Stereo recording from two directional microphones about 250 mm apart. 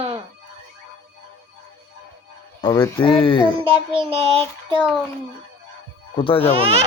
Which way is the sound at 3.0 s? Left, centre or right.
Left.